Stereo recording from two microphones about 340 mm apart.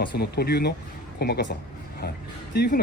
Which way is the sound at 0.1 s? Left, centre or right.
Left.